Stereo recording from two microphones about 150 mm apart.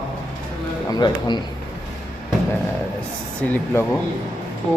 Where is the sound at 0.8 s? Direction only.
30° left (ahead or behind).